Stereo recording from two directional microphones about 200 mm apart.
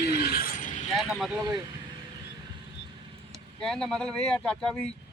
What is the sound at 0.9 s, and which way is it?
Speech, centre (ahead or behind).